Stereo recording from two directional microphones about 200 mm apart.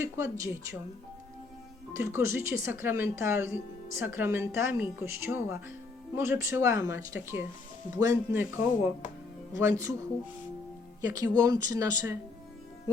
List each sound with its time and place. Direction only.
0.0 s speech: 15° right (ahead or behind)
1.9 s speech: 15° right (ahead or behind)
11.0 s speech: 20° right (ahead or behind)